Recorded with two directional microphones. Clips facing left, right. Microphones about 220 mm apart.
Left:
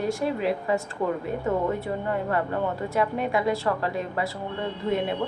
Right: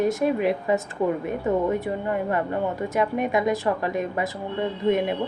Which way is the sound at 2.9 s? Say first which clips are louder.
Right 2 dB; 20° right (ahead or behind).